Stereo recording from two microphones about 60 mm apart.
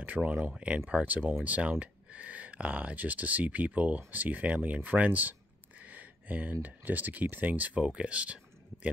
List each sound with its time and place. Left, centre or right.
0.0 s speech: right
5.8 s a sound: right
6.6 s speech: right